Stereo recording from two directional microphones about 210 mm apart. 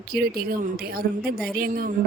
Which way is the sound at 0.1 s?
45° right (ahead or behind).